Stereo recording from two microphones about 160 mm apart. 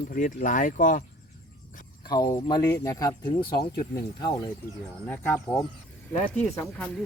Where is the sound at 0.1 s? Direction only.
55° left (ahead or behind).